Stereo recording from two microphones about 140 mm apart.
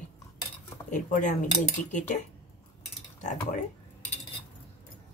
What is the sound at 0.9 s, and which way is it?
Speech, 65° left (ahead or behind).